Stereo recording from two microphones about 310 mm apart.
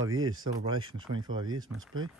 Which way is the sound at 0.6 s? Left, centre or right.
Centre.